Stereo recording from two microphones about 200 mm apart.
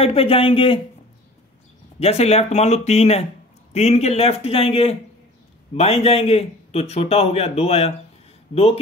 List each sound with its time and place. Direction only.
0.0 s speech: 30° left (ahead or behind)
2.0 s a man's voice: 30° left (ahead or behind)